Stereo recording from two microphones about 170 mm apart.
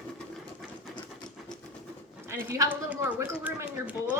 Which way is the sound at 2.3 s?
15° right (ahead or behind).